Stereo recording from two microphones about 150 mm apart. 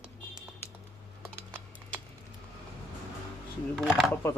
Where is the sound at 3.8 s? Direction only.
Centre (ahead or behind).